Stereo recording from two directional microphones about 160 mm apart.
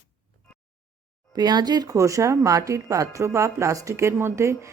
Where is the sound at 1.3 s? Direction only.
25° right (ahead or behind).